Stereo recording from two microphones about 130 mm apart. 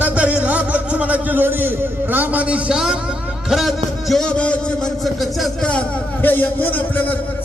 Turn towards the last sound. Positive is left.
turn(degrees=15)  # may be behind; listen again after turning